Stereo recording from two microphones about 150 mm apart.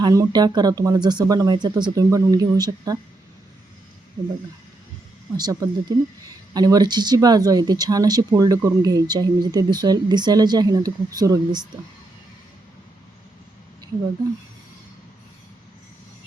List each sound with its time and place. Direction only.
0.0 s speech: 25° right (ahead or behind)
5.4 s speech: 25° right (ahead or behind)